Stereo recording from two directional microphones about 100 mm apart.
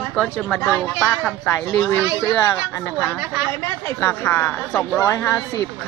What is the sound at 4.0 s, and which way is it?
Speech, 20° left (ahead or behind).